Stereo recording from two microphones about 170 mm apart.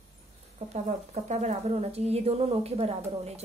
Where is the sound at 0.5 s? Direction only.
40° right (ahead or behind).